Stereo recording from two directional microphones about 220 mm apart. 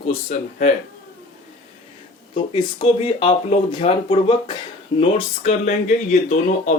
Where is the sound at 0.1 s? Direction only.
30° left (ahead or behind).